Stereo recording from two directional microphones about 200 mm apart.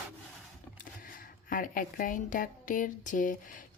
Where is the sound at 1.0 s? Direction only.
45° left (ahead or behind).